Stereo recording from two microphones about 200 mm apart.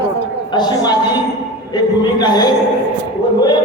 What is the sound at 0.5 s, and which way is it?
Speech, 20° left (ahead or behind).